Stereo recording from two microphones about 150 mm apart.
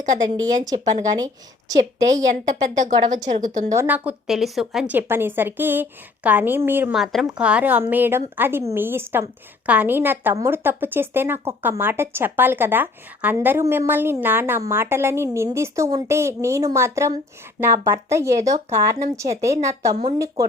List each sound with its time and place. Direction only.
0.5 s speech: 25° right (ahead or behind)
2.0 s a woman's voice: 55° right (ahead or behind)
3.7 s a woman's voice: 15° right (ahead or behind)
6.9 s a woman's voice: centre (ahead or behind); by 20.4 s 20° right (ahead or behind)